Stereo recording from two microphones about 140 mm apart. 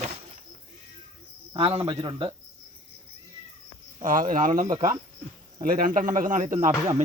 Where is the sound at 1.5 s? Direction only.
45° right (ahead or behind).